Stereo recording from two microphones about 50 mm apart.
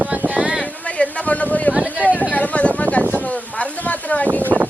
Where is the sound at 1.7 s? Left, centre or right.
Centre.